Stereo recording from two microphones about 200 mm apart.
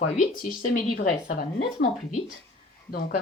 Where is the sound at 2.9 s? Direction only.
50° left (ahead or behind).